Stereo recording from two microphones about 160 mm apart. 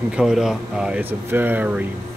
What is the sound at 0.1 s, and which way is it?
Speech, 5° right (ahead or behind).